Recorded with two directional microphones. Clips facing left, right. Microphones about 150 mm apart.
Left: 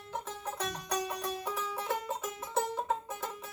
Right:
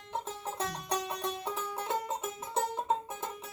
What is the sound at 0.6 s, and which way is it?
Music, 25° right (ahead or behind).